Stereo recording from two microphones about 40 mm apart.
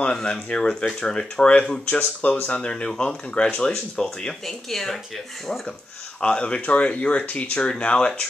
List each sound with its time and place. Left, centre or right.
0.1 s speech: left
2.0 s speech: left
2.4 s speech: left
4.5 s speech: centre
6.2 s speech: left